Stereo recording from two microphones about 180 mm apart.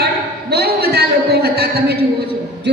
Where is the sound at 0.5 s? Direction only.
60° right (ahead or behind).